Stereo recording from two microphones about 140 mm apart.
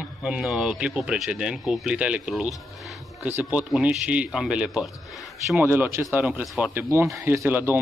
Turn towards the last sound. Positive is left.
turn(degrees=-15)  # may be behind; listen again after turning